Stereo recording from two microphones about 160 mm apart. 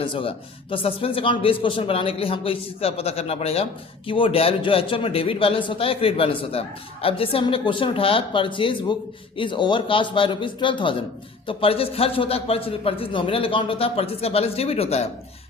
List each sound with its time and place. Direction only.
0.0 s speech: 35° left (ahead or behind)